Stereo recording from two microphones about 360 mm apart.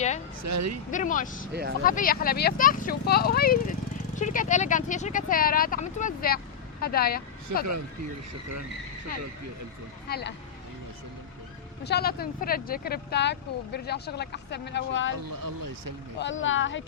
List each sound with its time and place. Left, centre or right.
0.4 s speech: right
0.9 s speech: left
7.5 s speech: right
10.1 s speech: left
11.8 s speech: left
15.3 s speech: right
16.1 s speech: left